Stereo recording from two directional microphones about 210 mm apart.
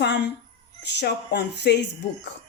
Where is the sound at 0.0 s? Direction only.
55° left (ahead or behind).